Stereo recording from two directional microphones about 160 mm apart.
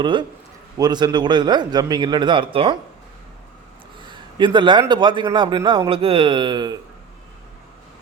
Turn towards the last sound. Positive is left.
turn(degrees=-25)  # may be behind; listen again after turning